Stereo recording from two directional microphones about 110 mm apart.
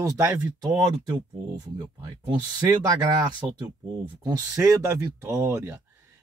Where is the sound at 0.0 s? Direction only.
30° right (ahead or behind).